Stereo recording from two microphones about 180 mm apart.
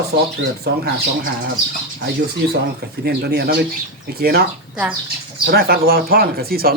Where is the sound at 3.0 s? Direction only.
60° right (ahead or behind).